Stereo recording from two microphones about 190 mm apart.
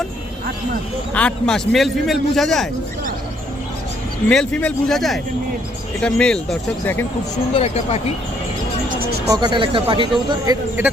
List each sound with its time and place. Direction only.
1.1 s speech: 5° left (ahead or behind)
4.3 s speech: 5° left (ahead or behind)
7.5 s speech: 35° left (ahead or behind)
9.3 s speech: 20° right (ahead or behind)